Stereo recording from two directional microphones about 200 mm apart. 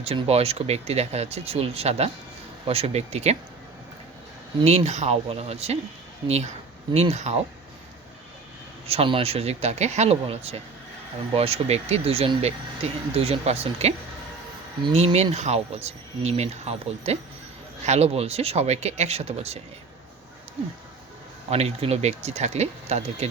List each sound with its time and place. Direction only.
0.0 s speech: 30° right (ahead or behind)
4.6 s speech: 30° right (ahead or behind)
8.9 s speech: 30° right (ahead or behind)
21.5 s speech: 30° right (ahead or behind)